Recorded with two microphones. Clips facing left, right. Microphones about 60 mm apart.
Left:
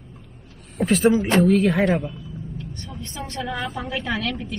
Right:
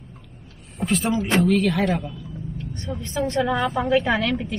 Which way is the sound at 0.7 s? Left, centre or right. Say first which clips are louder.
Left 5 dB; centre.